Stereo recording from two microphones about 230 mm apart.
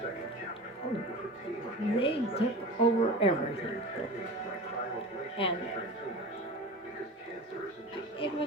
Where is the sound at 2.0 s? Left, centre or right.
Left.